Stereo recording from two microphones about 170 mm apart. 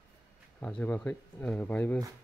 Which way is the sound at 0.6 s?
10° left (ahead or behind).